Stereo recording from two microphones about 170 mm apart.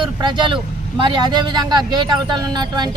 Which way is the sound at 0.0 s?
25° right (ahead or behind).